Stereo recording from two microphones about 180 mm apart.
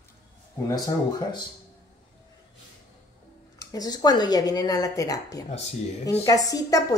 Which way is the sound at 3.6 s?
20° left (ahead or behind).